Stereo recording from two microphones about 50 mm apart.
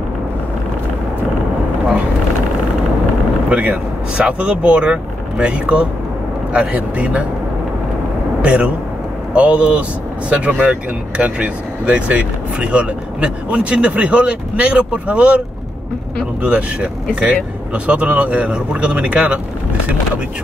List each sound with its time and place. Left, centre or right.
3.4 s speech: centre
8.4 s a man's voice: right
16.4 s speech: right